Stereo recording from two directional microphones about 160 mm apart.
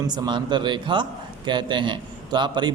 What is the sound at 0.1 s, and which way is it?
A man's voice, 30° right (ahead or behind).